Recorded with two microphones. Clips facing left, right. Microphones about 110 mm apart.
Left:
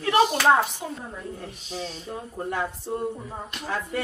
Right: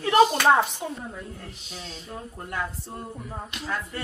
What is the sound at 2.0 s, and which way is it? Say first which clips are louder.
Speech: left 5 dB; 25° left (ahead or behind).